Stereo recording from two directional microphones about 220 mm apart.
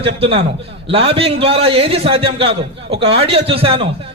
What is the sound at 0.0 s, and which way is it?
A man's voice, 25° right (ahead or behind).